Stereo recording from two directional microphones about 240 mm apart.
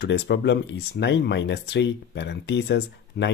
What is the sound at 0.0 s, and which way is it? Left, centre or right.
Speech, left.